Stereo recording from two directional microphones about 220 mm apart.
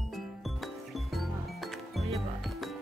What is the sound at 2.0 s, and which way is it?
Music, centre (ahead or behind).